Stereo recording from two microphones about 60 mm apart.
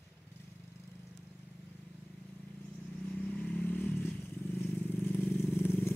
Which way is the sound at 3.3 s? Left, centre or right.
Left.